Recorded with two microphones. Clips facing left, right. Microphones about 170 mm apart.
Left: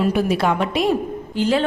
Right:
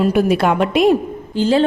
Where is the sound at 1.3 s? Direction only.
30° right (ahead or behind).